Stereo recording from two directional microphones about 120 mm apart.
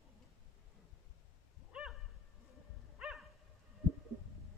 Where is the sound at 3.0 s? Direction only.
5° right (ahead or behind).